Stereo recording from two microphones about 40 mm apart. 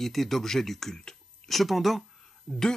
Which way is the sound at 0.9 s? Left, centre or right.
Centre.